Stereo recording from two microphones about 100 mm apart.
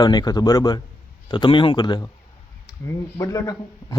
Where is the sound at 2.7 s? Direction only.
35° left (ahead or behind).